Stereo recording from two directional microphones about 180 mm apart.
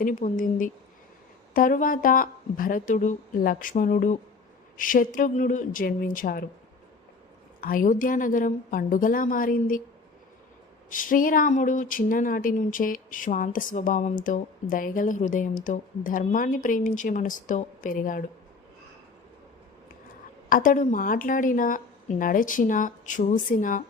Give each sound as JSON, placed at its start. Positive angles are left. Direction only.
{"t": 0.0, "sound": "speech", "side_deg": 45}
{"t": 7.6, "sound": "speech", "side_deg": 50}
{"t": 10.9, "sound": "speech", "side_deg": 50}
{"t": 20.5, "sound": "speech", "side_deg": 50}